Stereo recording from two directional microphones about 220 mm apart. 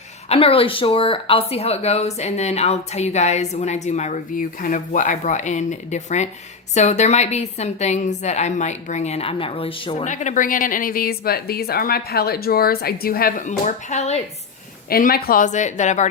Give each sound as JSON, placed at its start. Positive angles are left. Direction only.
{"t": 0.3, "sound": "a woman's voice", "side_deg": 25}
{"t": 14.8, "sound": "a woman's voice", "side_deg": 40}